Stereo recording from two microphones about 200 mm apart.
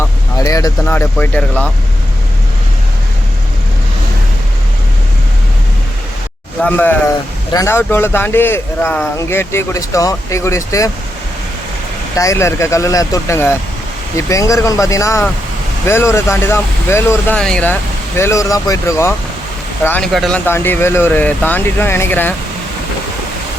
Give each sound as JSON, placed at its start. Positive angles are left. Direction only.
{"t": 0.0, "sound": "speech", "side_deg": 15}
{"t": 6.6, "sound": "speech", "side_deg": 10}
{"t": 12.1, "sound": "speech", "side_deg": 15}